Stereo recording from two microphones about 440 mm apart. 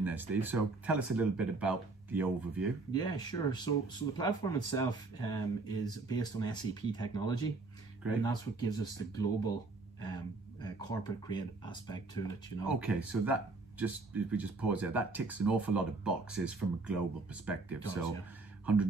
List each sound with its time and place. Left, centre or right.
0.0 s speech: centre
2.9 s speech: centre
12.6 s speech: centre